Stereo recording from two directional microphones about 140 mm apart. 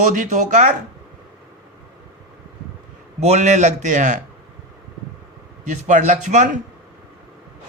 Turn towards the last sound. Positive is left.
turn(degrees=-60)  # may be behind; listen again after turning